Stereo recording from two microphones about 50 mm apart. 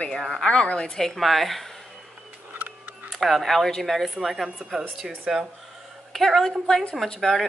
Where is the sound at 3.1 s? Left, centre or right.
Centre.